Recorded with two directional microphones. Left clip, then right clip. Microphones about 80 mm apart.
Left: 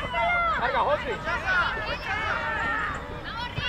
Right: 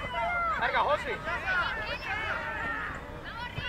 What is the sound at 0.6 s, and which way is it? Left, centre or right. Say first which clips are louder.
Speech: left 3 dB; right.